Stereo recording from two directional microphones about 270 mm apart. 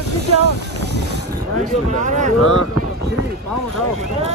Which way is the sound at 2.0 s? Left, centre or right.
Right.